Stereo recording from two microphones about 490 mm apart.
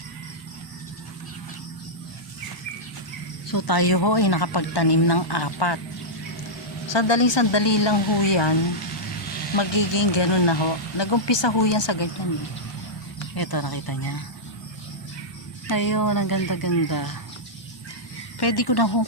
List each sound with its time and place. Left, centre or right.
3.5 s a woman's voice: left
6.8 s speech: left
9.6 s speech: left
13.3 s a woman's voice: left
15.6 s speech: left
18.3 s a woman's voice: left